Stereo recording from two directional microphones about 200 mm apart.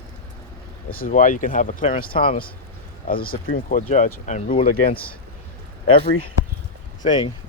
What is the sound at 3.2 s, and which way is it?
Speech, 45° left (ahead or behind).